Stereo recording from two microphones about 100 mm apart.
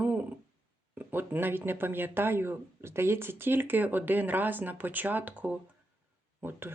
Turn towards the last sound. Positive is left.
turn(degrees=-25)  # may be behind; listen again after turning